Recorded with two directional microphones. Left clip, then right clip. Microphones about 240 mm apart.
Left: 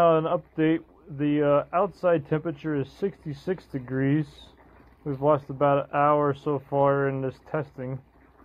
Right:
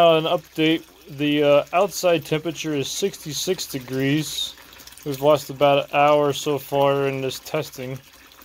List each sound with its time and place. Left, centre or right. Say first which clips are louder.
0.0 s speech: right 5 dB; centre